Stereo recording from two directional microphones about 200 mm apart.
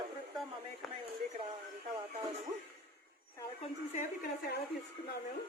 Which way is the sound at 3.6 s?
40° left (ahead or behind).